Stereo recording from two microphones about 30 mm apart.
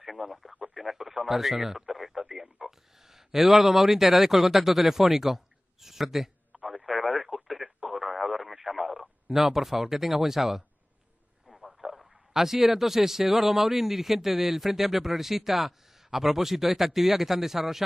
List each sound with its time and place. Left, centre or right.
0.0 s speech: centre
6.5 s radio: right
6.9 s radio: centre
9.3 s speech: centre
11.8 s speech: centre